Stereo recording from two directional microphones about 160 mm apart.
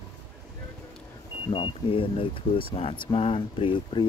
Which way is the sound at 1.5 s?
30° left (ahead or behind).